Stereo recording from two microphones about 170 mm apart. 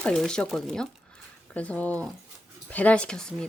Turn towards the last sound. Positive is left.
turn(degrees=5)  # may be behind; listen again after turning